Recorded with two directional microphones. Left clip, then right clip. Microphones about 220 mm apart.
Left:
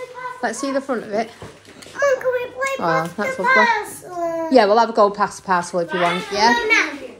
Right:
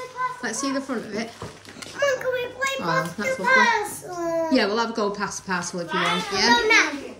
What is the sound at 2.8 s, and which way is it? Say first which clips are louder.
A woman's voice: left 5 dB; centre (ahead or behind).